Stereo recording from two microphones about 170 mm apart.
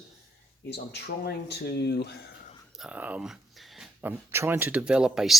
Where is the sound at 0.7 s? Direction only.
80° left.